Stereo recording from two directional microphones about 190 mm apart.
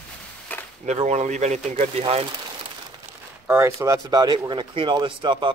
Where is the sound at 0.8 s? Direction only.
35° right (ahead or behind).